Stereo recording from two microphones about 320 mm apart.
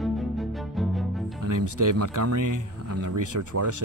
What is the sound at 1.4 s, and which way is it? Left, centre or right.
Speech, right.